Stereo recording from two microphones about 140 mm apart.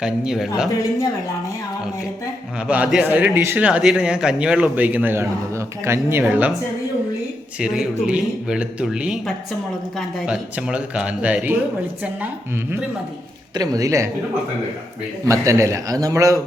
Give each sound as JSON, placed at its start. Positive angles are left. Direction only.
{"t": 0.0, "sound": "speech", "side_deg": 0}
{"t": 0.7, "sound": "a woman's voice", "side_deg": 25}
{"t": 2.6, "sound": "speech", "side_deg": -10}
{"t": 7.6, "sound": "speech", "side_deg": -5}
{"t": 13.5, "sound": "a man's voice", "side_deg": -25}
{"t": 15.3, "sound": "a man's voice", "side_deg": -20}